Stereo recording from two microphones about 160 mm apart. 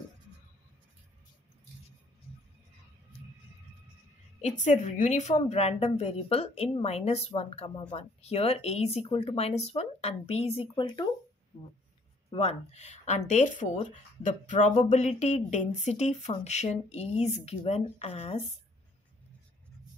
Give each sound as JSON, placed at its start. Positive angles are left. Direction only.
{"t": 4.4, "sound": "a woman's voice", "side_deg": 45}
{"t": 12.3, "sound": "speech", "side_deg": 40}